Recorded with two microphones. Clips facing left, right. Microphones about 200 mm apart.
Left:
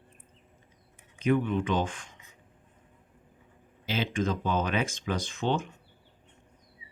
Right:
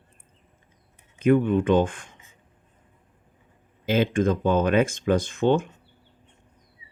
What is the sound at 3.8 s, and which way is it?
Speech, 50° right (ahead or behind).